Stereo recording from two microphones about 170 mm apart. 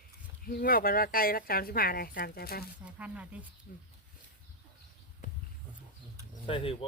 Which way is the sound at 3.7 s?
65° left (ahead or behind).